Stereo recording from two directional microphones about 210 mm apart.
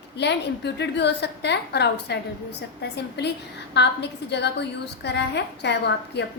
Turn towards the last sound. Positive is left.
turn(degrees=55)  # may be behind; listen again after turning